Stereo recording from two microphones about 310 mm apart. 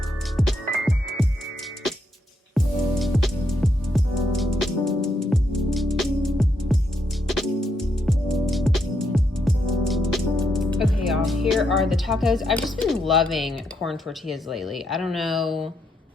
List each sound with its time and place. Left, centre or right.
0.3 s music: centre
2.6 s music: centre
11.0 s speech: centre